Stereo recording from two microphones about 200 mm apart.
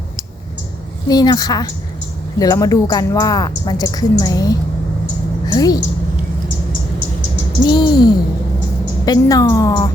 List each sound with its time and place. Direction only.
1.0 s a woman's voice: 20° left (ahead or behind)
7.7 s a woman's voice: 20° left (ahead or behind)